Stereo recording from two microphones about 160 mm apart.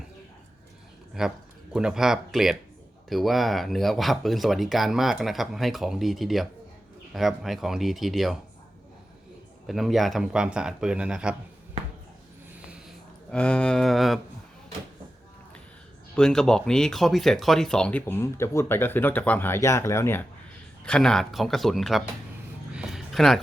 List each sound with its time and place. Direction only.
1.2 s speech: 5° right (ahead or behind)
9.6 s speech: centre (ahead or behind)
13.3 s speech: 5° left (ahead or behind)
16.1 s speech: 5° left (ahead or behind)
20.8 s speech: 5° left (ahead or behind)
22.7 s a sound: 5° right (ahead or behind)